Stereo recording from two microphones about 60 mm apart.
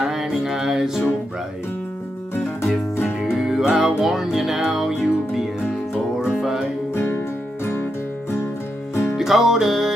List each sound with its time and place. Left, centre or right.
0.0 s music: centre
2.6 s music: left
3.3 s music: centre
7.0 s music: left
9.1 s music: centre